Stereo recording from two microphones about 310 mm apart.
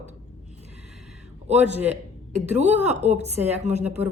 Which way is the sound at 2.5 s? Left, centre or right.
Right.